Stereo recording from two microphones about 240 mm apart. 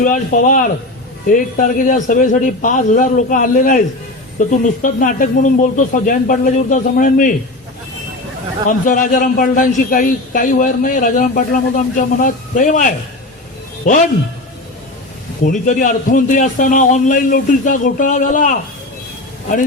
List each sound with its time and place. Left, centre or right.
0.0 s a man's voice: left
8.9 s a man's voice: left
15.4 s a man's voice: left